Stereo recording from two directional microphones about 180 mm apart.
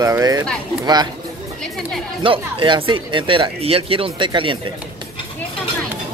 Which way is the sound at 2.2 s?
25° right (ahead or behind).